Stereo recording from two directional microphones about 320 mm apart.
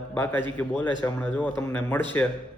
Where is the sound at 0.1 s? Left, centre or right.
Centre.